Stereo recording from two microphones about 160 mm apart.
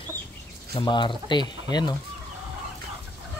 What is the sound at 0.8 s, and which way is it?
Speech, 30° left (ahead or behind).